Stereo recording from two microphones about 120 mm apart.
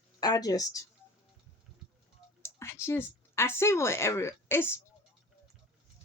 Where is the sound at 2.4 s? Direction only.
20° left (ahead or behind).